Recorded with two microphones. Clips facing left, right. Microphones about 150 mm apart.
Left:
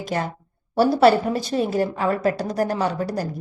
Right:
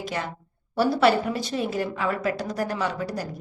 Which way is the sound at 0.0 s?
40° left (ahead or behind).